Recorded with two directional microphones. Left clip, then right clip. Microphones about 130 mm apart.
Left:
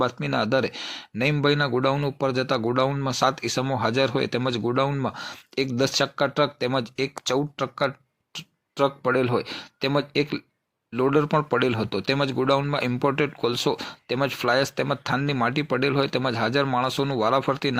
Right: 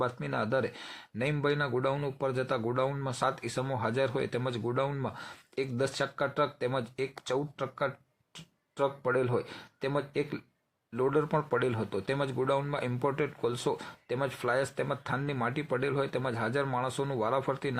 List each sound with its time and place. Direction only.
0.0 s speech: 30° left (ahead or behind)